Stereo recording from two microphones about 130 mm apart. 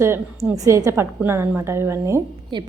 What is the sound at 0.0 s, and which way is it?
A woman's voice, 20° right (ahead or behind).